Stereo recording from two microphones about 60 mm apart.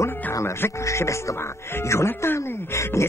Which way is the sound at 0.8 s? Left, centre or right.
Left.